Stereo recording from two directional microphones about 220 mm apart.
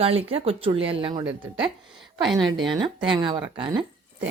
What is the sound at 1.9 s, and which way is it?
Speech, centre (ahead or behind).